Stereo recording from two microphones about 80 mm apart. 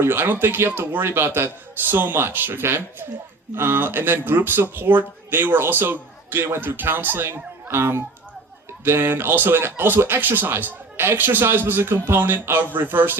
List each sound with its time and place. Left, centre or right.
0.0 s speech: right